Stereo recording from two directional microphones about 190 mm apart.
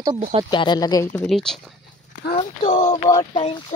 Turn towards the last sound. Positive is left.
turn(degrees=30)  # may be behind; listen again after turning